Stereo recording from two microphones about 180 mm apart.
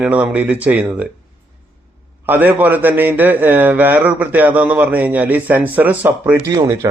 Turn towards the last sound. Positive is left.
turn(degrees=-10)  # may be behind; listen again after turning